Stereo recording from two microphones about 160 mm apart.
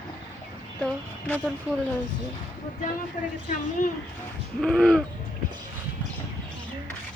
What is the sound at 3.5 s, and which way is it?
Speech, 55° left (ahead or behind).